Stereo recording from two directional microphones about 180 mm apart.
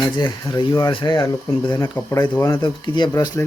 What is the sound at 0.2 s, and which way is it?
Speech, 25° left (ahead or behind).